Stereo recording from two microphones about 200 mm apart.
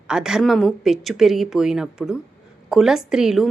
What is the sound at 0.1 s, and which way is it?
Speech, 5° right (ahead or behind).